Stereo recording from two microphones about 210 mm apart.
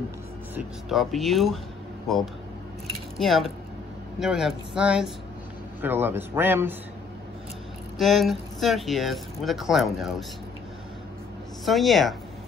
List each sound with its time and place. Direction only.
0.6 s a man's voice: centre (ahead or behind)
8.0 s speech: centre (ahead or behind)
11.6 s speech: centre (ahead or behind)